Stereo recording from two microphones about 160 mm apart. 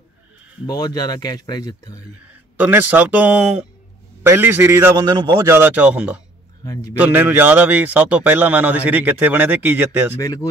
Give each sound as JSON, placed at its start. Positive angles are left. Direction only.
{"t": 0.7, "sound": "speech", "side_deg": 25}
{"t": 2.5, "sound": "a man's voice", "side_deg": -10}
{"t": 5.0, "sound": "a man's voice", "side_deg": -25}
{"t": 6.6, "sound": "speech", "side_deg": 25}
{"t": 7.0, "sound": "a man's voice", "side_deg": -10}
{"t": 10.2, "sound": "speech", "side_deg": 20}